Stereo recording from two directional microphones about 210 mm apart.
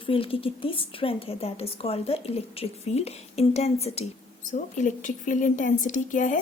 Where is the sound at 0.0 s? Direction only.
25° left (ahead or behind).